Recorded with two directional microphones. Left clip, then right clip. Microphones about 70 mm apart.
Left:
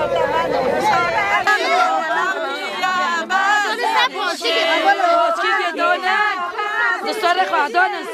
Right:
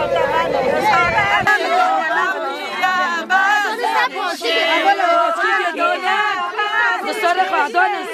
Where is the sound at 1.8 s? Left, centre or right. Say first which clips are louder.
Right 1 dB; centre.